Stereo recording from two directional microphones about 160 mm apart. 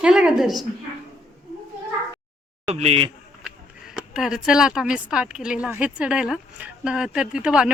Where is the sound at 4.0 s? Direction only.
5° right (ahead or behind).